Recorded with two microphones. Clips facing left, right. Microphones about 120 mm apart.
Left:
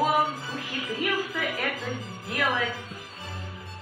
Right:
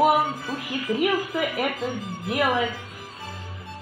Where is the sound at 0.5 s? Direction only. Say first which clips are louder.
Right 9 dB; 15° right (ahead or behind).